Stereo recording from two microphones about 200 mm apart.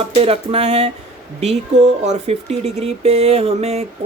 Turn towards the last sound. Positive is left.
turn(degrees=-30)  # may be behind; listen again after turning